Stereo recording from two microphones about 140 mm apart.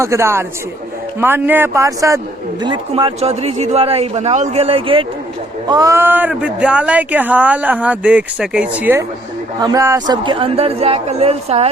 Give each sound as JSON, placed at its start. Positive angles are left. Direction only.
{"t": 0.0, "sound": "a man's voice", "side_deg": -20}
{"t": 5.6, "sound": "speech", "side_deg": -25}
{"t": 9.6, "sound": "speech", "side_deg": -25}
{"t": 10.2, "sound": "a man's voice", "side_deg": -40}